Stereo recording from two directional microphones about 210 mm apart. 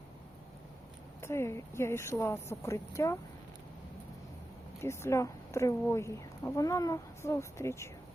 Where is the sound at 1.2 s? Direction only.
10° left (ahead or behind).